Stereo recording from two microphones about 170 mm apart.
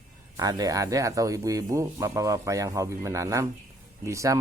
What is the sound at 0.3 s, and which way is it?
Speech, 20° right (ahead or behind).